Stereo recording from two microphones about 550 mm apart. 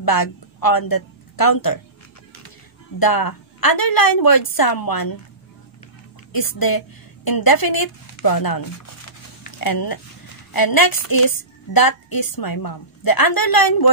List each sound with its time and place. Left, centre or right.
0.0 s a woman's voice: left
3.0 s a woman's voice: left
6.3 s a woman's voice: left